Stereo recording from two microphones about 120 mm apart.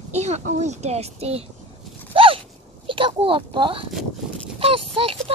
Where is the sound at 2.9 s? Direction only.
45° right (ahead or behind).